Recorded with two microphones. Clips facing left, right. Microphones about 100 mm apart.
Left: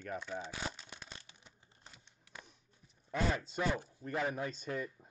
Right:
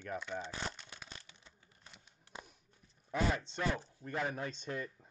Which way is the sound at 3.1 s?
5° left (ahead or behind).